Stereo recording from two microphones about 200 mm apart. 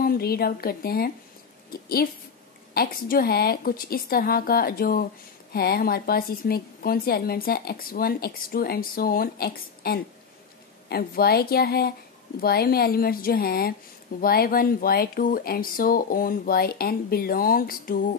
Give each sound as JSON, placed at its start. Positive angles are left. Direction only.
{"t": 0.0, "sound": "speech", "side_deg": 50}
{"t": 2.7, "sound": "speech", "side_deg": 50}